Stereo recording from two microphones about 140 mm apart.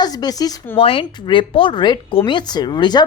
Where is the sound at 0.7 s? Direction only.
40° left (ahead or behind).